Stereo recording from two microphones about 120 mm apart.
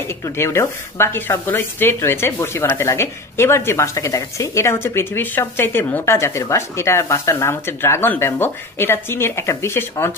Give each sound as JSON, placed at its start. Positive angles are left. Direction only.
{"t": 0.2, "sound": "speech", "side_deg": 25}